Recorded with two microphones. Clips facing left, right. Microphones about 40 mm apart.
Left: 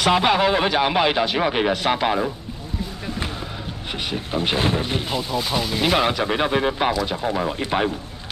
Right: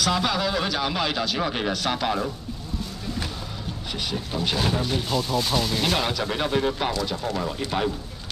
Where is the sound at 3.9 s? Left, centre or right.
Left.